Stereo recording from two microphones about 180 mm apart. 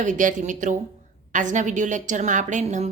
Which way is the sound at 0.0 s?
45° right (ahead or behind).